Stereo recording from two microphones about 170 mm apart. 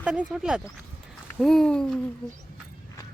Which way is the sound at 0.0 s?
10° right (ahead or behind).